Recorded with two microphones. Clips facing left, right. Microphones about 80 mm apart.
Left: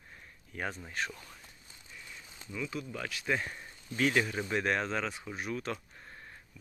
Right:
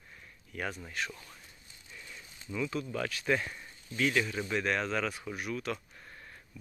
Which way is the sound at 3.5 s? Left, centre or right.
Left.